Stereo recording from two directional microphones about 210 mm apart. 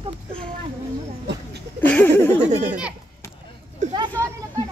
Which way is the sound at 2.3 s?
35° right (ahead or behind).